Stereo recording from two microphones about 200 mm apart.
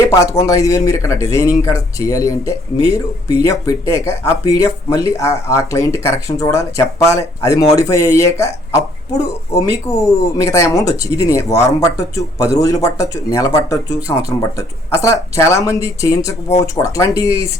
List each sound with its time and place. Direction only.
0.0 s speech: 15° left (ahead or behind)
2.8 s speech: 30° right (ahead or behind)
3.4 s speech: 15° left (ahead or behind)
17.2 s speech: 30° right (ahead or behind)